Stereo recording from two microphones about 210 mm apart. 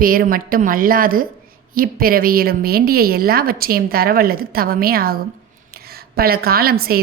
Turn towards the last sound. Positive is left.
turn(degrees=-45)  # may be behind; listen again after turning